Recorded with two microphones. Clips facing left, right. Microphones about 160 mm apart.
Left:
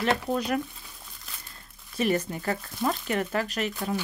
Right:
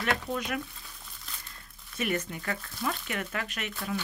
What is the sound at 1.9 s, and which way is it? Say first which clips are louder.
Speech: left 5 dB; 35° left (ahead or behind).